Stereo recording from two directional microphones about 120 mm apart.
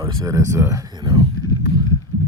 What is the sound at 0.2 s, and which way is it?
Speech, 25° right (ahead or behind).